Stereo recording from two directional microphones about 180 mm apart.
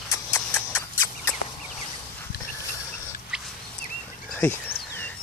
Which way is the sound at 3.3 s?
5° right (ahead or behind).